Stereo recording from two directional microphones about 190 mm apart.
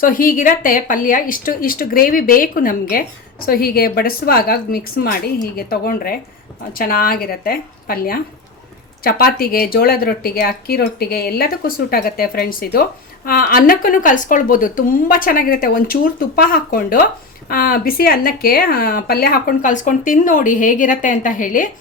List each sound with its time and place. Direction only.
0.0 s speech: 45° left (ahead or behind)